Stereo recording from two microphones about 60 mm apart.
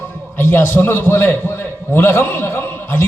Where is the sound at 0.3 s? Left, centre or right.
Left.